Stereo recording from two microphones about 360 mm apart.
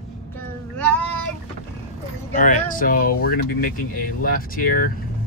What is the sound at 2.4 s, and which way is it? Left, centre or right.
Speech, left.